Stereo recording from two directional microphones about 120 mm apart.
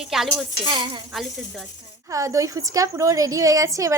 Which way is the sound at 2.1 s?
25° right (ahead or behind).